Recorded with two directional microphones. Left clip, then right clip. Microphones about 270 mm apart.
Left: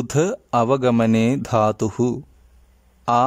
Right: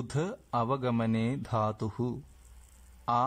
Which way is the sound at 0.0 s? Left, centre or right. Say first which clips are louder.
Left 14 dB; left.